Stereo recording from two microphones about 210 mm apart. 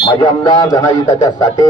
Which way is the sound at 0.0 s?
20° left (ahead or behind).